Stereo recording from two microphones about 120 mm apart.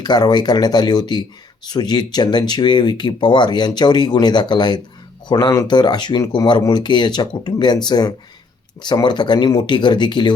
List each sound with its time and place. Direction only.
0.0 s speech: 35° left (ahead or behind)